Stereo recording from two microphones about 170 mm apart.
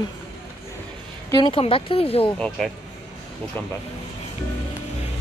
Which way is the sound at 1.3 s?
30° left (ahead or behind).